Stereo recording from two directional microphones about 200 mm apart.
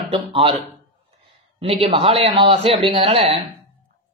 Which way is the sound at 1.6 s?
30° right (ahead or behind).